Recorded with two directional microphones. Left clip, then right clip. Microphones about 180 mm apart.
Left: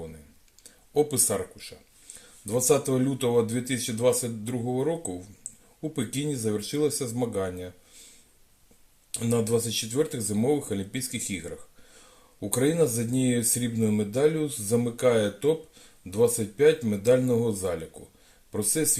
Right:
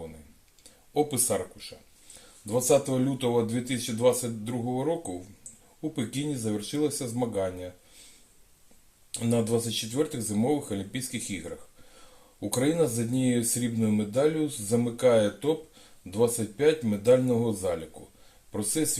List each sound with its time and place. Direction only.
0.9 s speech: 45° left (ahead or behind)
9.1 s speech: 45° left (ahead or behind)
12.4 s speech: 45° left (ahead or behind)